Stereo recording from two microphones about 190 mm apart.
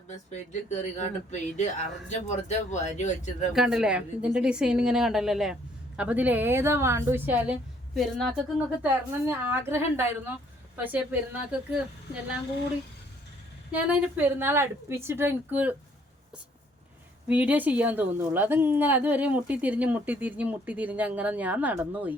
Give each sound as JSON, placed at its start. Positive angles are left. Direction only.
{"t": 0.3, "sound": "speech", "side_deg": 40}
{"t": 3.5, "sound": "a woman's voice", "side_deg": -5}
{"t": 8.8, "sound": "a woman's voice", "side_deg": -10}
{"t": 13.7, "sound": "a woman's voice", "side_deg": -10}
{"t": 17.2, "sound": "a woman's voice", "side_deg": -10}